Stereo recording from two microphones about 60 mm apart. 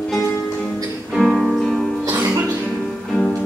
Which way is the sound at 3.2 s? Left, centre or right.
Left.